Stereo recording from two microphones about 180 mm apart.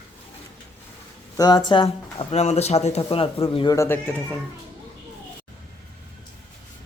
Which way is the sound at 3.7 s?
15° left (ahead or behind).